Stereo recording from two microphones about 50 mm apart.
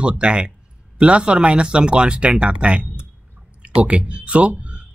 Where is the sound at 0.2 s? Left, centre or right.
Right.